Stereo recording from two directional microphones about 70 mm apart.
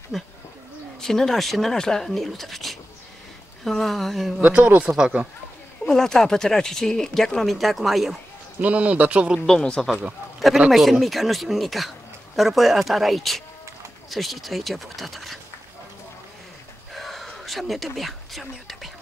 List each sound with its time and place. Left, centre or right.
0.1 s speech: centre
4.4 s a man's voice: centre
5.9 s speech: centre
8.5 s a man's voice: centre
9.5 s speech: centre
9.8 s speech: centre
10.7 s speech: centre
16.9 s a sound: centre